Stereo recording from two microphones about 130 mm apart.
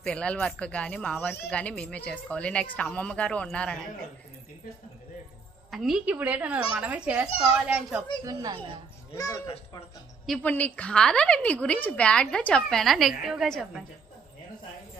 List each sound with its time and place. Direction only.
0.0 s speech: 10° left (ahead or behind)
5.7 s a woman's voice: centre (ahead or behind)
8.3 s speech: 30° right (ahead or behind)
9.1 s speech: 25° left (ahead or behind)
10.2 s speech: 5° left (ahead or behind)